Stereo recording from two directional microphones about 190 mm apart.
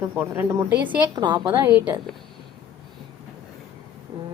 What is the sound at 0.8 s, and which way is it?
A woman's voice, 25° right (ahead or behind).